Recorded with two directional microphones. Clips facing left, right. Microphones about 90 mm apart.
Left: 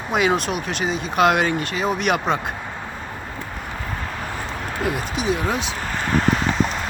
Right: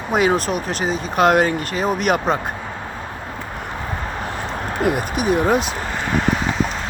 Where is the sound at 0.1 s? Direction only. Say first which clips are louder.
Right 2 dB; 40° right (ahead or behind).